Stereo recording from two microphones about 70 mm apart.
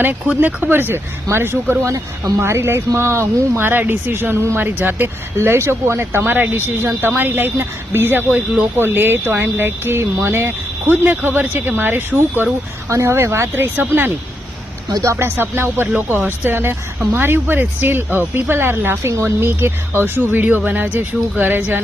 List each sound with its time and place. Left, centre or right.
0.3 s speech: right
12.9 s speech: right